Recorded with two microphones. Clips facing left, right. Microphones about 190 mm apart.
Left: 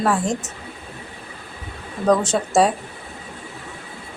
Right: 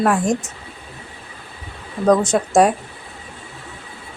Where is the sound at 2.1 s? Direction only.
10° right (ahead or behind).